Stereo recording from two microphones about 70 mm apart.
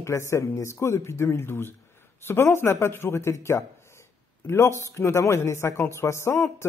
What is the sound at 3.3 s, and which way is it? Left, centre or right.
A woman's voice, left.